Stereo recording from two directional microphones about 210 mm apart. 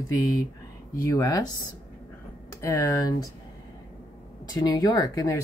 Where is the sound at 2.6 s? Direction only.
15° left (ahead or behind).